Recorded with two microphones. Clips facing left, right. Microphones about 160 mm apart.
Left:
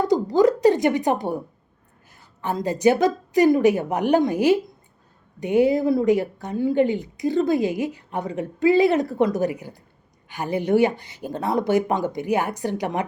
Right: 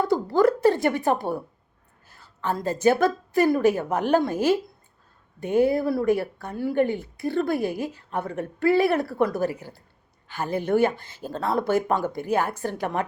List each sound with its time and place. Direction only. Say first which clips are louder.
0.0 s speech: left 2 dB; 15° left (ahead or behind)